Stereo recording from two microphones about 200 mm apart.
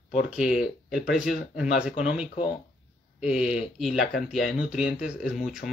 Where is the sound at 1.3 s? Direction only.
45° left (ahead or behind).